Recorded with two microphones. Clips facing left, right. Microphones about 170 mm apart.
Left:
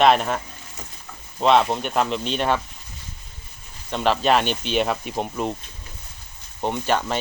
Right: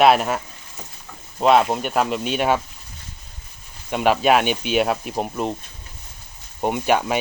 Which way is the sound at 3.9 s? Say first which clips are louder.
Right 2 dB; 10° right (ahead or behind).